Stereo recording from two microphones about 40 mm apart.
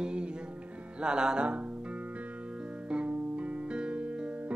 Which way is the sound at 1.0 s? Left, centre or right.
Right.